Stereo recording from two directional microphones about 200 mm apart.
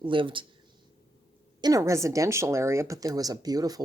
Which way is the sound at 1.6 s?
15° right (ahead or behind).